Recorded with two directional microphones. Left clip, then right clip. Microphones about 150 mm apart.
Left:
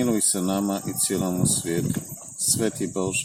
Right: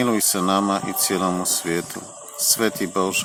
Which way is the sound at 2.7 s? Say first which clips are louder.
Right 4 dB; 25° left (ahead or behind).